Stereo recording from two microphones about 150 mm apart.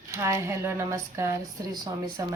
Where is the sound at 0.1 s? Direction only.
20° right (ahead or behind).